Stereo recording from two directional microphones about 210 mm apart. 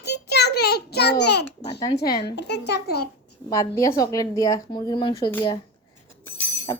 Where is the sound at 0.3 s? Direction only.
50° left (ahead or behind).